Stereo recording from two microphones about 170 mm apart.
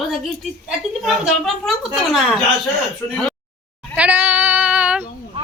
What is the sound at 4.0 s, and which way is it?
Child singing, 10° right (ahead or behind).